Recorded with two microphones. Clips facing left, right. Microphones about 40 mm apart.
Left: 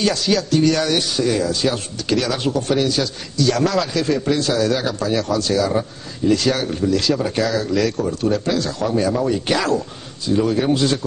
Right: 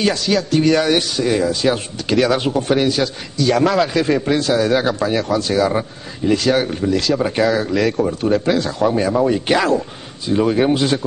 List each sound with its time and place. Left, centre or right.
0.3 s speech: centre